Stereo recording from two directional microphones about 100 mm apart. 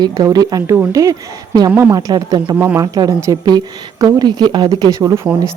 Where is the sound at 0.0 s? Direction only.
40° right (ahead or behind).